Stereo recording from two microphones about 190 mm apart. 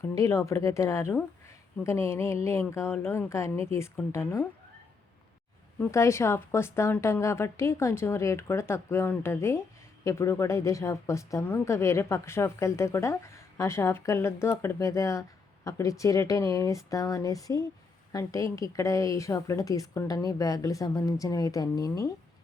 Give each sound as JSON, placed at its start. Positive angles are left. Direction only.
{"t": 0.0, "sound": "a woman's voice", "side_deg": 15}
{"t": 5.8, "sound": "a woman's voice", "side_deg": 15}